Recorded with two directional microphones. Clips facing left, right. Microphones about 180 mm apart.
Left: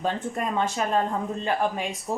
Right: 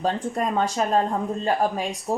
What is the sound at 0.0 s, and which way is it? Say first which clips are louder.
Speech: right 3 dB; 35° right (ahead or behind).